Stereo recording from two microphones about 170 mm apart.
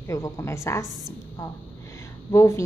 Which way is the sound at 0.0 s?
15° left (ahead or behind).